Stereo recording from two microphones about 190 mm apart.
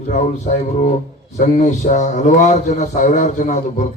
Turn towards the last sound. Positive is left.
turn(degrees=40)  # may be behind; listen again after turning